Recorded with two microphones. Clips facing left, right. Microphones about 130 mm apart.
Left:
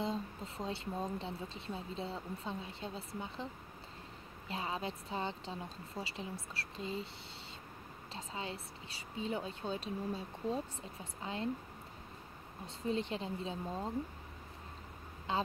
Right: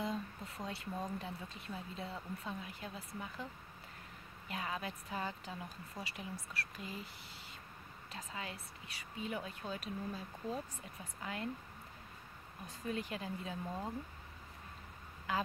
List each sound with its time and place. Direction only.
0.0 s speech: 25° left (ahead or behind)
4.5 s speech: 25° left (ahead or behind)
8.1 s speech: 25° left (ahead or behind)
12.6 s speech: 25° left (ahead or behind)
15.3 s speech: 25° left (ahead or behind)